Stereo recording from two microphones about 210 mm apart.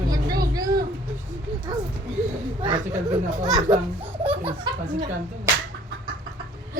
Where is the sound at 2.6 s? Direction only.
25° right (ahead or behind).